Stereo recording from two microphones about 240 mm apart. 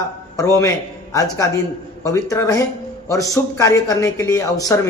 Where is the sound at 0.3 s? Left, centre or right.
Centre.